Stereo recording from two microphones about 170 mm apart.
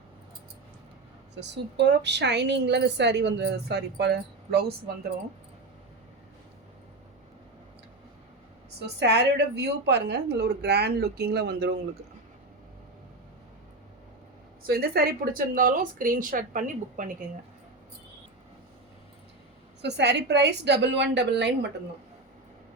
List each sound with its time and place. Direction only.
1.4 s a woman's voice: 90° right; by 4.6 s 70° right (ahead or behind)
9.0 s speech: 80° right
14.7 s speech: 65° right (ahead or behind)
19.8 s a woman's voice: 90° right